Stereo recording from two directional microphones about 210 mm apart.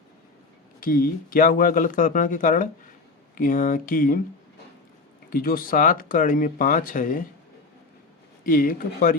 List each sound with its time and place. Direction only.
0.8 s speech: 45° left (ahead or behind)
5.3 s speech: 45° left (ahead or behind)
8.4 s speech: 40° left (ahead or behind)